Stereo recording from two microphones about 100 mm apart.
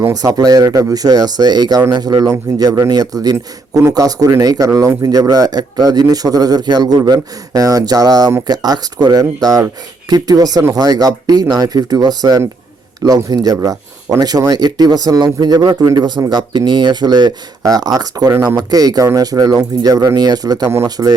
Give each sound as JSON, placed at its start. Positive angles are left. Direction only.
{"t": 0.0, "sound": "speech", "side_deg": -35}